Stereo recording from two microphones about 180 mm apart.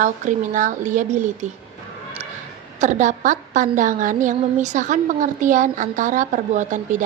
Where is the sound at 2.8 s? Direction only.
40° right (ahead or behind).